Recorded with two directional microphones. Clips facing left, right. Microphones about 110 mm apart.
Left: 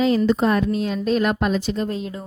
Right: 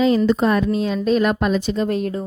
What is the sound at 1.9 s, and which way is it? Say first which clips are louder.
Speech: right 6 dB; 60° right (ahead or behind).